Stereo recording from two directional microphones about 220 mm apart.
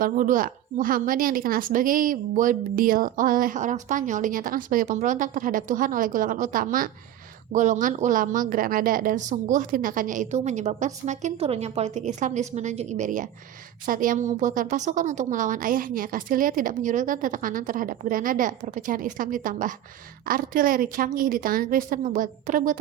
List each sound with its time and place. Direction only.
0.0 s a woman's voice: 40° right (ahead or behind)